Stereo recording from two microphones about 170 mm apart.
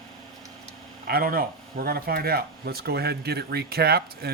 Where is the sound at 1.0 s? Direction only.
65° right (ahead or behind).